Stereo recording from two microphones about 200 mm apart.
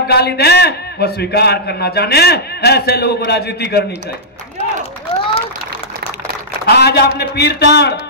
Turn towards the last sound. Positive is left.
turn(degrees=55)  # may be behind; listen again after turning